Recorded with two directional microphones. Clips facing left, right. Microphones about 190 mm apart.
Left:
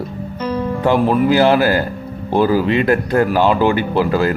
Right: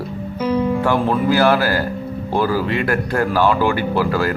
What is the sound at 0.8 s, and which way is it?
Speech, 20° left (ahead or behind).